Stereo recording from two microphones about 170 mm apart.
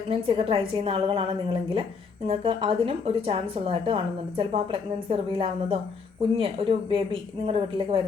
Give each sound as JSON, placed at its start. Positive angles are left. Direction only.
{"t": 0.1, "sound": "a woman's voice", "side_deg": -30}